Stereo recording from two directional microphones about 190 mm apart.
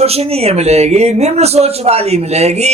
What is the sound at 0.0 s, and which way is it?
Speech, 30° right (ahead or behind).